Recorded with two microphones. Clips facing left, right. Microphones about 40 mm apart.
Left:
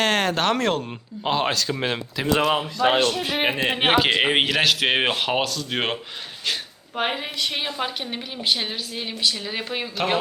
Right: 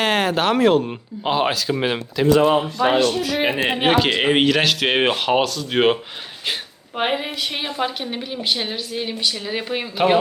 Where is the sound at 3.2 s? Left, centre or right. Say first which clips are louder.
Right 2 dB; left.